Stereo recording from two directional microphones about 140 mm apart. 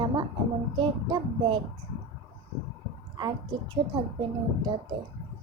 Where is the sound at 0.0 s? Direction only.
35° right (ahead or behind).